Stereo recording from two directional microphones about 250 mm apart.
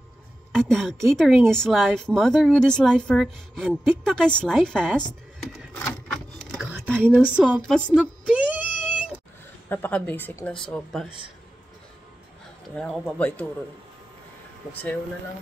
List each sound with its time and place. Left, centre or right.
0.5 s speech: centre
5.4 s a sound: centre
9.7 s speech: centre
11.1 s a man's voice: centre
12.7 s speech: centre